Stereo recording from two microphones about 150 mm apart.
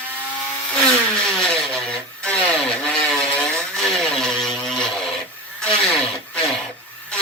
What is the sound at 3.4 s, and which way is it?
Vehicle, 5° left (ahead or behind).